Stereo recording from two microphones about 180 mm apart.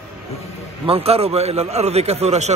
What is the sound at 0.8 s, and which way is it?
A man's voice, 35° right (ahead or behind).